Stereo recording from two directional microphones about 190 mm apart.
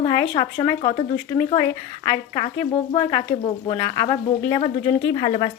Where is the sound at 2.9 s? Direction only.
25° left (ahead or behind).